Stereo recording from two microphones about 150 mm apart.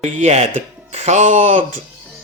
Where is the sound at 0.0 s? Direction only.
45° right (ahead or behind).